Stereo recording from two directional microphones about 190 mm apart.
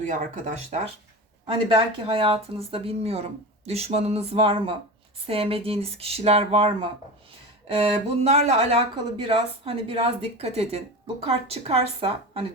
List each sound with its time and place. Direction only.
0.0 s speech: 40° right (ahead or behind)
1.5 s speech: 30° right (ahead or behind)